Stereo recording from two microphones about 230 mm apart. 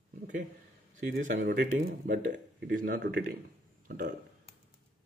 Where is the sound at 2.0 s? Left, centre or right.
Right.